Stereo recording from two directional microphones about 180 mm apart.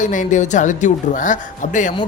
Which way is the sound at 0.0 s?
45° left (ahead or behind).